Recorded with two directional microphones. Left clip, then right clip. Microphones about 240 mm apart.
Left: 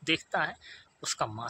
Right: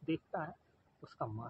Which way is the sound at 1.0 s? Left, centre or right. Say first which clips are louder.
Left 10 dB; left.